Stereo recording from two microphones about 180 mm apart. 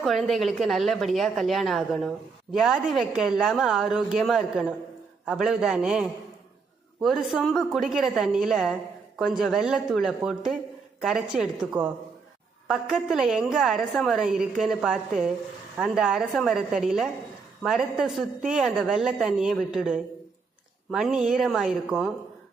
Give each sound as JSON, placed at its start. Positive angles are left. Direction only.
{"t": 0.0, "sound": "a woman's voice", "side_deg": 0}